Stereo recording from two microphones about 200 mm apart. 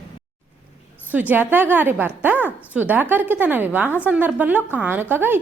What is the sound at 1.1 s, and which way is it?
A woman's voice, 10° right (ahead or behind).